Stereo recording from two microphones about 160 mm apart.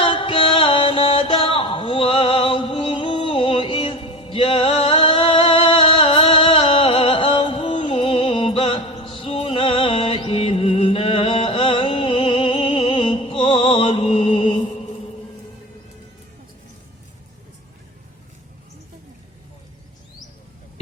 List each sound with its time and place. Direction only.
0.0 s music: 35° left (ahead or behind)